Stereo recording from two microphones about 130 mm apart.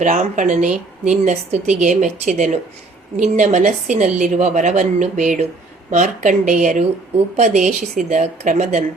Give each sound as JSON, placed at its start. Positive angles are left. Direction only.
{"t": 0.0, "sound": "speech", "side_deg": -75}